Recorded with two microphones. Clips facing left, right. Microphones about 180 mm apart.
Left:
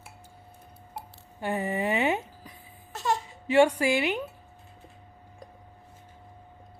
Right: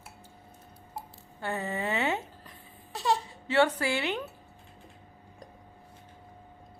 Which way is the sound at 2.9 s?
15° right (ahead or behind).